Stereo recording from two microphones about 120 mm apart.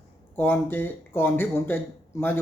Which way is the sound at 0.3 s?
15° left (ahead or behind).